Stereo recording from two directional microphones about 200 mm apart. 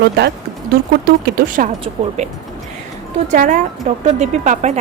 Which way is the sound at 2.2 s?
35° right (ahead or behind).